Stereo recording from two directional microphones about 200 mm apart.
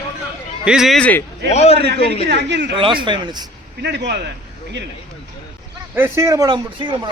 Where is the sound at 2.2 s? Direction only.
60° right (ahead or behind).